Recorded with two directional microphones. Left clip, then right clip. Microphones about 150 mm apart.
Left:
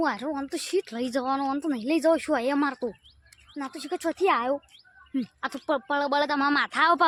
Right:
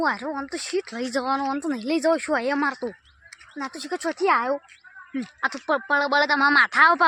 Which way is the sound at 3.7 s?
30° left (ahead or behind).